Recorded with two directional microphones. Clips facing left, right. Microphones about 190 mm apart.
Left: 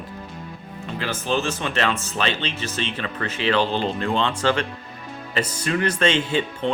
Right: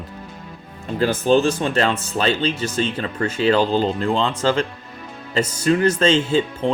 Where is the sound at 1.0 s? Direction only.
40° right (ahead or behind).